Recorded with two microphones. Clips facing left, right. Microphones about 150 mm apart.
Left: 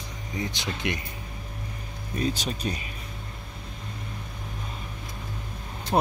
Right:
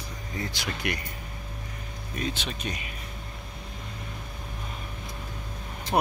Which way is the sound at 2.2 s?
40° left (ahead or behind).